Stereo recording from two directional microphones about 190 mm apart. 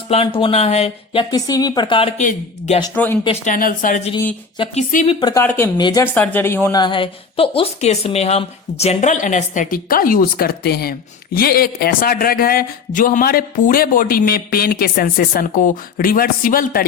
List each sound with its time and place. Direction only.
0.1 s speech: 30° left (ahead or behind)
2.1 s a woman's voice: 35° left (ahead or behind)
2.9 s speech: 10° left (ahead or behind)
3.4 s speech: 45° left (ahead or behind)
4.5 s a woman's voice: 30° left (ahead or behind)
5.2 s a woman's voice: 15° left (ahead or behind); by 16.8 s 50° left (ahead or behind)